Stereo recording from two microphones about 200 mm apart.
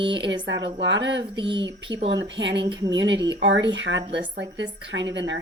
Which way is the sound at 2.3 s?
60° right (ahead or behind).